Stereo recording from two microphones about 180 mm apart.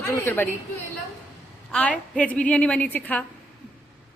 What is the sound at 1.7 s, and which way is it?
A woman's voice, 5° left (ahead or behind).